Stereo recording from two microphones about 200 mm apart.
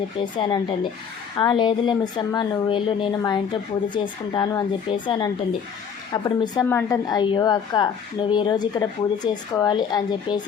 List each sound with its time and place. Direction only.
0.2 s a woman's voice: 25° left (ahead or behind)